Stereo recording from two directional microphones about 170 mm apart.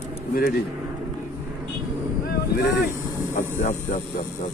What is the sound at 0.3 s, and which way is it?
Speech, 60° left (ahead or behind).